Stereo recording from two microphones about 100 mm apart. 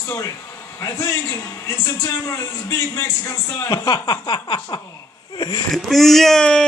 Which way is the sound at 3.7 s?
45° left (ahead or behind).